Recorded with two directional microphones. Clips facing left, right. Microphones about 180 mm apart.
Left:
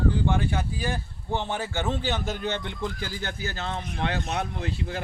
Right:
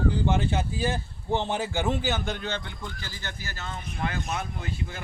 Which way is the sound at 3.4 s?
65° left (ahead or behind).